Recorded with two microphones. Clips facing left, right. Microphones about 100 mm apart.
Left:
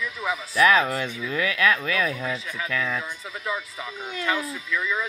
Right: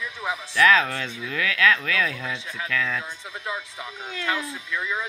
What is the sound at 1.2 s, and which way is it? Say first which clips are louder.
Speech: right 1 dB; 20° left (ahead or behind).